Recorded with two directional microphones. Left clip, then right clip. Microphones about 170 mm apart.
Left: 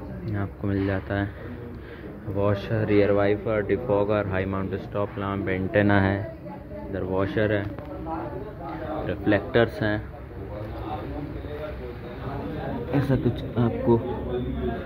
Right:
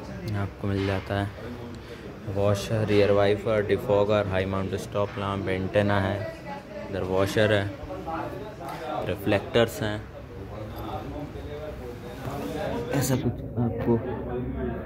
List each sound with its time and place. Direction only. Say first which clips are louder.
0.4 s speech: left 2 dB; 10° right (ahead or behind)
2.3 s speech: even; 10° right (ahead or behind)
6.9 s a man's voice: right 1 dB; 15° right (ahead or behind)
9.0 s a man's voice: left 3 dB; 15° right (ahead or behind)
12.9 s a man's voice: left 6 dB; centre (ahead or behind)